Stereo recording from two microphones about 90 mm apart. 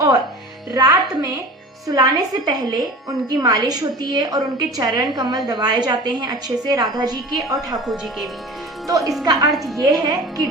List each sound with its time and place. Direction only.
0.7 s a woman's voice: 45° right (ahead or behind)
7.9 s speech: centre (ahead or behind)
8.9 s a woman's voice: 40° right (ahead or behind)